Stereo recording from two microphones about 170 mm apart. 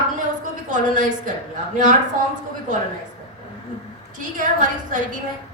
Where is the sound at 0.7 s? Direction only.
50° right (ahead or behind).